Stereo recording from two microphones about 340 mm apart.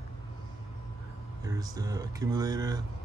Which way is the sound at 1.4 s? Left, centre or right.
Centre.